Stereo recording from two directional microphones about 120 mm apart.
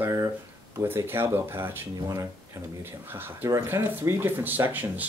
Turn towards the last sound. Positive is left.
turn(degrees=-15)  # may be behind; listen again after turning